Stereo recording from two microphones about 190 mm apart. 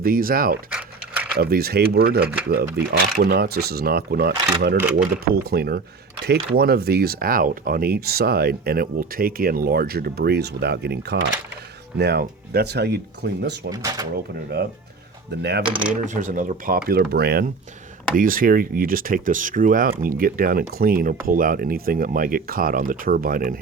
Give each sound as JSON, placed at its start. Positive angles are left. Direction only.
{"t": 0.0, "sound": "speech", "side_deg": -50}
{"t": 0.7, "sound": "a sound", "side_deg": -10}
{"t": 1.4, "sound": "speech", "side_deg": -55}
{"t": 2.2, "sound": "speech", "side_deg": -10}
{"t": 2.7, "sound": "speech", "side_deg": -55}
{"t": 4.8, "sound": "speech", "side_deg": -10}
{"t": 5.3, "sound": "speech", "side_deg": -55}
{"t": 13.7, "sound": "speech", "side_deg": -20}
{"t": 15.3, "sound": "speech", "side_deg": -60}
{"t": 16.0, "sound": "speech", "side_deg": -40}